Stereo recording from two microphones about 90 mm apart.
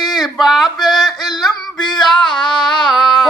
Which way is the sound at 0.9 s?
45° left (ahead or behind).